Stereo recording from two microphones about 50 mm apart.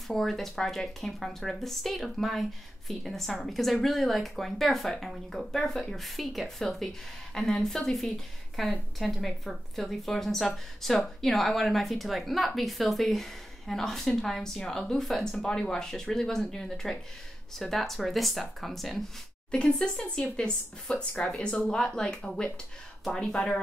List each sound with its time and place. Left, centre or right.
0.1 s speech: centre
19.5 s a woman's voice: left